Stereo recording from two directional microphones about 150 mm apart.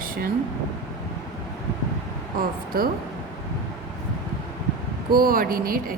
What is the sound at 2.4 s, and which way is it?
Speech, 80° right.